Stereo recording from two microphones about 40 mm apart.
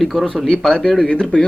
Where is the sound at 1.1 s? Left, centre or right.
Left.